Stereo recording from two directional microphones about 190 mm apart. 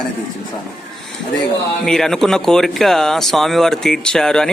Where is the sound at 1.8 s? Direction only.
5° left (ahead or behind).